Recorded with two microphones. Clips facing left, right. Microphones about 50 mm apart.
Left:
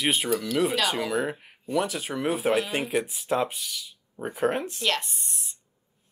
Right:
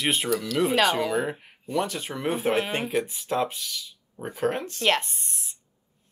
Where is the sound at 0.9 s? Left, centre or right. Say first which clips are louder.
Right 2 dB; centre.